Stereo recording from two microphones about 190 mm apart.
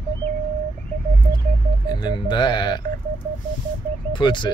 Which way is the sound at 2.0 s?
25° left (ahead or behind).